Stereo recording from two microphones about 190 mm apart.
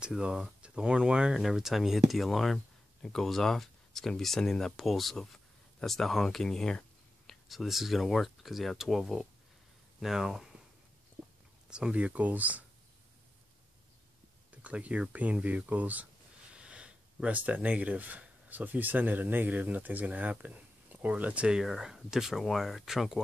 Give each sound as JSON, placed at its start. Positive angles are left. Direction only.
{"t": 0.0, "sound": "speech", "side_deg": -5}
{"t": 11.7, "sound": "speech", "side_deg": -5}
{"t": 14.5, "sound": "speech", "side_deg": -5}